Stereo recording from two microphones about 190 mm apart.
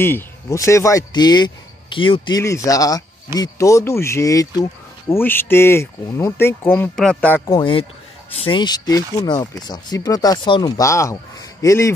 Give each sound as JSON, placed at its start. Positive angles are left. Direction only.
{"t": 0.0, "sound": "speech", "side_deg": 15}
{"t": 7.4, "sound": "speech", "side_deg": 25}